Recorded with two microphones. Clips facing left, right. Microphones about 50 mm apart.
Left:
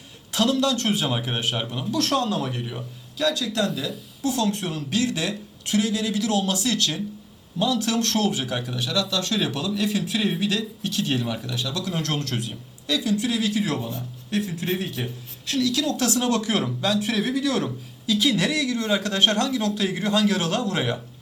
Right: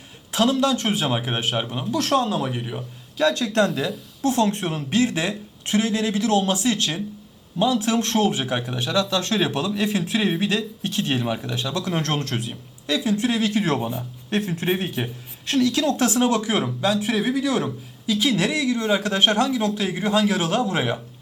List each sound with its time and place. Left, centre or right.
0.3 s speech: centre
3.3 s speech: right
13.1 s speech: right; by 21.0 s centre